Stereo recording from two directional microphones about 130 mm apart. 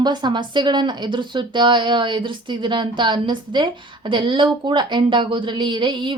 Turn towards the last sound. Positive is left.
turn(degrees=-40)  # may be behind; listen again after turning